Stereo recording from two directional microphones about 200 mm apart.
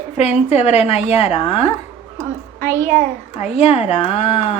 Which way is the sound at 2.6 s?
10° left (ahead or behind).